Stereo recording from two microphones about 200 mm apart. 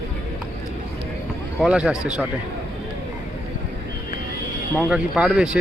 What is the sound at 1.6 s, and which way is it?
Speech, 5° right (ahead or behind).